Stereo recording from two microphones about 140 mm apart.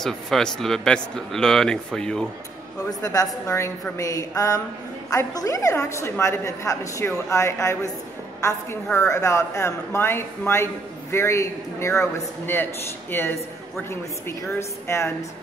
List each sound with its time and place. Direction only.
0.0 s speech: 5° left (ahead or behind)
2.9 s speech: 25° left (ahead or behind)
8.9 s a man's voice: 20° left (ahead or behind)